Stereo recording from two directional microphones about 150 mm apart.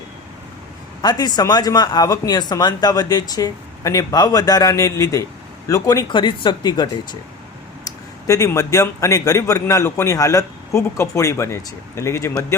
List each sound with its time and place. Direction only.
1.0 s a man's voice: 25° left (ahead or behind)